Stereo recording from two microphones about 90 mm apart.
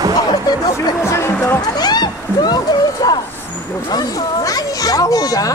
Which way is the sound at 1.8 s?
50° left (ahead or behind).